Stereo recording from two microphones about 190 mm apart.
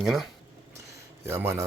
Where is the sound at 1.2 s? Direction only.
15° right (ahead or behind).